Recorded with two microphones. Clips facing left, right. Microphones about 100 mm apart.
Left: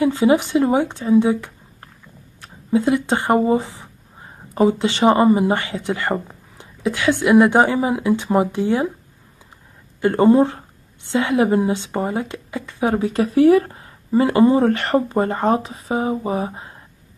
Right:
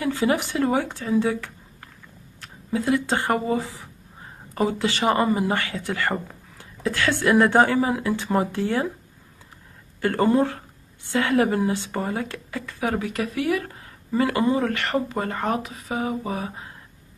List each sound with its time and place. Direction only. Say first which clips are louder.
0.0 s speech: left 7 dB; 20° left (ahead or behind)
2.7 s speech: left 5 dB; 20° left (ahead or behind)
10.0 s speech: left 6 dB; 20° left (ahead or behind)